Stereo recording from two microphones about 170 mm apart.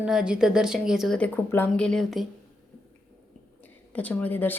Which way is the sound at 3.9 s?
10° left (ahead or behind).